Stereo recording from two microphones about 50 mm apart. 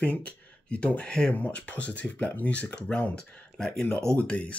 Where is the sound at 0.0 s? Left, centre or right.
Left; by 3.8 s centre.